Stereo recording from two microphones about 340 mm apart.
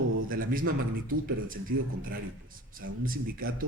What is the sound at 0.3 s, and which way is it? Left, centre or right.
A man's voice, right.